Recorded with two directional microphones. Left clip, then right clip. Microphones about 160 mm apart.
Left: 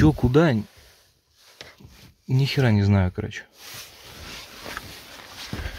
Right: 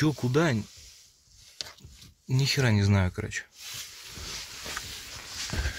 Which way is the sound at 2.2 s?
25° left (ahead or behind).